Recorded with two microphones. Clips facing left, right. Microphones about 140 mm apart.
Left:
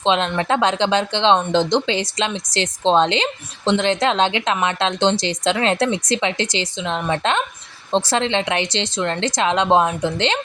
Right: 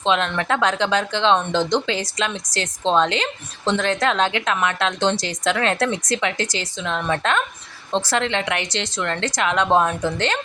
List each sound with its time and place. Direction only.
0.0 s speech: 25° left (ahead or behind)